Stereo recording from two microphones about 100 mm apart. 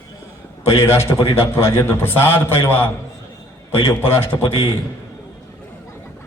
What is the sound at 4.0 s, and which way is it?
Speech, 25° left (ahead or behind).